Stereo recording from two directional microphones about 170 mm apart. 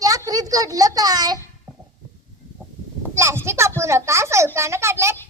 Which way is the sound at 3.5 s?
15° right (ahead or behind).